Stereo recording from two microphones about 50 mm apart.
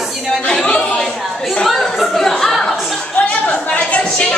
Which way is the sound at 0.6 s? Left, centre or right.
Left.